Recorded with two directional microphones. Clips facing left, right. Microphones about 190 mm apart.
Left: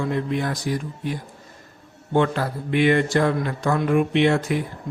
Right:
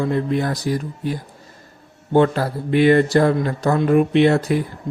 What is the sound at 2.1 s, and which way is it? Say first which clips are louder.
A man's voice: right 5 dB; 35° right (ahead or behind).